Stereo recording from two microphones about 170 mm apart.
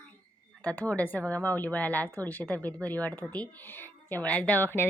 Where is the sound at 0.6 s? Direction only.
10° left (ahead or behind).